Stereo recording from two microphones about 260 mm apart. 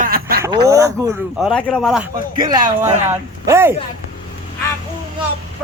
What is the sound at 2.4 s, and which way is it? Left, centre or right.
Speech, centre.